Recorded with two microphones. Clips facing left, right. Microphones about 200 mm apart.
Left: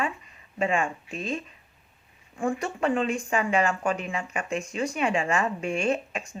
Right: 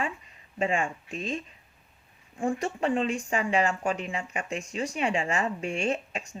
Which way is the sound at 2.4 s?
30° right (ahead or behind).